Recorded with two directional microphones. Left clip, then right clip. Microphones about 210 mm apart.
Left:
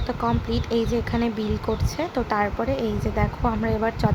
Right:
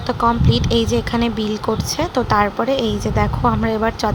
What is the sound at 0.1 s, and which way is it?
A woman's voice, 15° right (ahead or behind).